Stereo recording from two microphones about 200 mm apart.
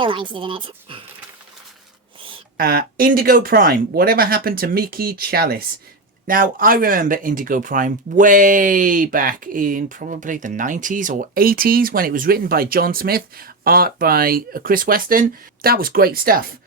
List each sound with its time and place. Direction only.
0.0 s a woman's voice: 25° right (ahead or behind)
2.6 s speech: 50° right (ahead or behind)